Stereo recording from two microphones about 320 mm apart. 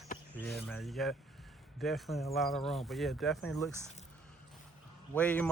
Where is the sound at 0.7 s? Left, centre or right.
Centre.